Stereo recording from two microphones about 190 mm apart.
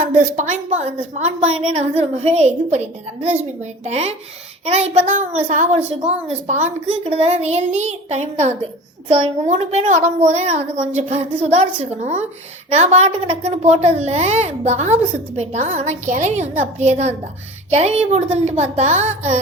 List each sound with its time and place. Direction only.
0.0 s a woman's voice: 40° right (ahead or behind)